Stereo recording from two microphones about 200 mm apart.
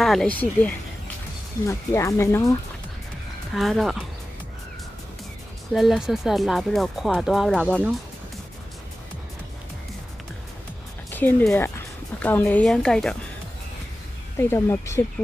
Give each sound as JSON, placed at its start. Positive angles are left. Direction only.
{"t": 0.0, "sound": "speech", "side_deg": 0}
{"t": 3.5, "sound": "speech", "side_deg": 0}
{"t": 5.7, "sound": "speech", "side_deg": 0}
{"t": 11.1, "sound": "speech", "side_deg": 10}
{"t": 14.3, "sound": "speech", "side_deg": 10}